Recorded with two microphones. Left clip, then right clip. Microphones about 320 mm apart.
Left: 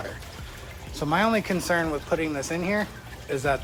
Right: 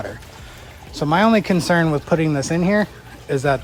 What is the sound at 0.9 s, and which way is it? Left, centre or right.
Speech, right.